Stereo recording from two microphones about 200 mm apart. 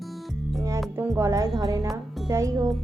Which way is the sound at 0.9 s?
10° right (ahead or behind).